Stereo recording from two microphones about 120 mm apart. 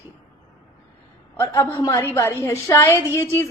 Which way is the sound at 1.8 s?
25° left (ahead or behind).